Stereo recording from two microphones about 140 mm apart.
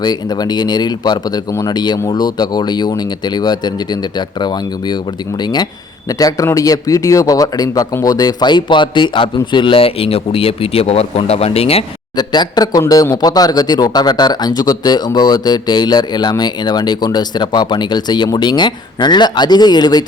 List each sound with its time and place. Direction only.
0.0 s speech: 30° left (ahead or behind); by 11.9 s 45° left (ahead or behind)
12.1 s speech: 30° left (ahead or behind)